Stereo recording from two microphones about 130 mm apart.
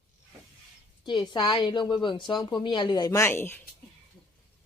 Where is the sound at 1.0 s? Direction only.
35° left (ahead or behind); by 3.6 s 15° left (ahead or behind).